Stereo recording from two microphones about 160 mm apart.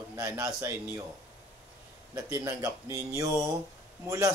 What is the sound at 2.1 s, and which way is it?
A man's voice, 20° right (ahead or behind).